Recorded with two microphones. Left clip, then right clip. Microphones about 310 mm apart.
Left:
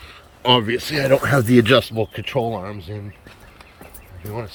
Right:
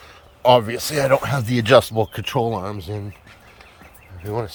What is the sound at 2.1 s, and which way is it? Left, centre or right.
Speech, right.